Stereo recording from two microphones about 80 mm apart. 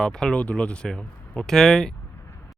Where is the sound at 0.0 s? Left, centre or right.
Centre.